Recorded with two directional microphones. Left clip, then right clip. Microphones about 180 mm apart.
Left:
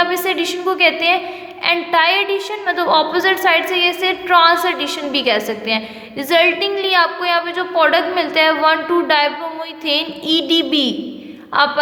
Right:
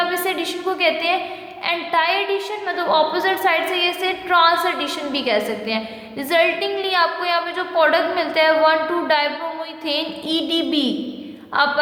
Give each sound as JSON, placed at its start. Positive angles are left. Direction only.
{"t": 0.0, "sound": "a woman's voice", "side_deg": 20}